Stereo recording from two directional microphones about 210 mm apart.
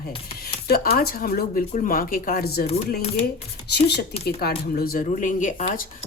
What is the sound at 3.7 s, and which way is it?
Speech, 50° left (ahead or behind).